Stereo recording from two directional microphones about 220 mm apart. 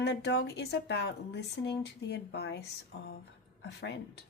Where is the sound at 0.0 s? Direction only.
50° left (ahead or behind).